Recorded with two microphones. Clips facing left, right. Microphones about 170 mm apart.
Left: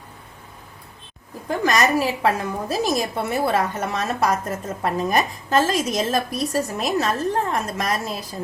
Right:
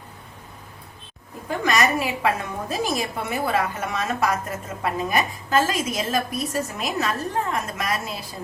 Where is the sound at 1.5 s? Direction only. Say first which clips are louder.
Left 2 dB; 35° left (ahead or behind).